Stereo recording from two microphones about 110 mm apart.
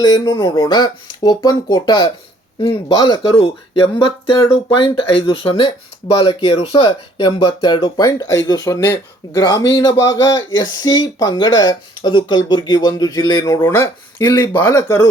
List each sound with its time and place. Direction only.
0.0 s speech: 40° left (ahead or behind)
3.2 s speech: 55° left (ahead or behind)
7.6 s speech: 40° left (ahead or behind)
13.7 s speech: 25° left (ahead or behind)
14.7 s speech: 30° left (ahead or behind)